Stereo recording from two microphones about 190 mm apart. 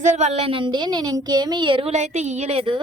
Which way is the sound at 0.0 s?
40° right (ahead or behind).